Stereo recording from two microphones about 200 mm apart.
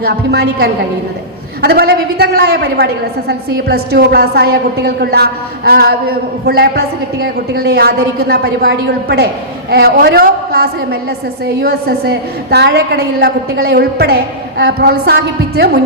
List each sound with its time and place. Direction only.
0.0 s a woman's voice: 55° right (ahead or behind)